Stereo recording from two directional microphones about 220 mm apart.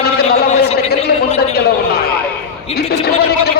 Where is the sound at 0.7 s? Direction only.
30° left (ahead or behind).